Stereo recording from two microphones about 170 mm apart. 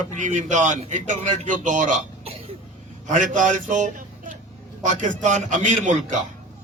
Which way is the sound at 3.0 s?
50° right (ahead or behind).